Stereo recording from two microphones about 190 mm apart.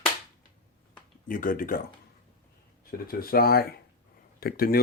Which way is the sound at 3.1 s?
50° left (ahead or behind).